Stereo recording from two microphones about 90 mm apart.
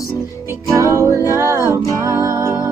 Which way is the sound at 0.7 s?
35° right (ahead or behind).